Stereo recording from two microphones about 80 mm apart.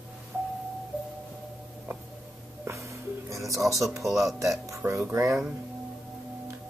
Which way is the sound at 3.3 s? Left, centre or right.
Right.